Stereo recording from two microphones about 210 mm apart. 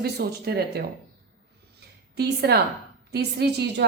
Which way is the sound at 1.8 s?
50° right (ahead or behind).